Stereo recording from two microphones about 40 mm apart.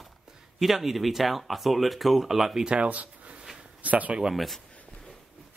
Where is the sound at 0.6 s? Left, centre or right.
Centre.